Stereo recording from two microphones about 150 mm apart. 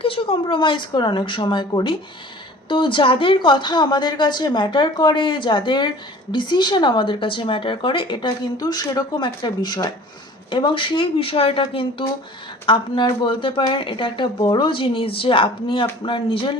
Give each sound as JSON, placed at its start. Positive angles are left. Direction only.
{"t": 0.0, "sound": "speech", "side_deg": 40}